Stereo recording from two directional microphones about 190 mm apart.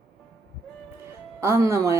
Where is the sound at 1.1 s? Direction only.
15° right (ahead or behind).